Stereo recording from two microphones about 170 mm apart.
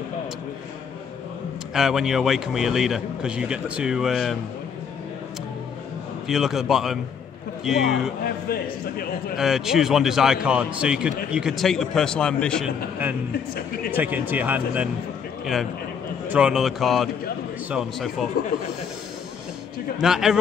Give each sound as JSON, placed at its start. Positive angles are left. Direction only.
{"t": 1.7, "sound": "a man's voice", "side_deg": -5}
{"t": 6.2, "sound": "a man's voice", "side_deg": 0}
{"t": 8.2, "sound": "a man's voice", "side_deg": 60}
{"t": 9.4, "sound": "a man's voice", "side_deg": 0}
{"t": 13.9, "sound": "speech", "side_deg": -10}
{"t": 16.3, "sound": "a man's voice", "side_deg": -5}
{"t": 20.0, "sound": "a man's voice", "side_deg": 0}